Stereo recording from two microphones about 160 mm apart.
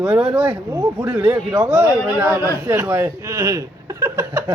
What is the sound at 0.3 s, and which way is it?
Speech, 10° right (ahead or behind).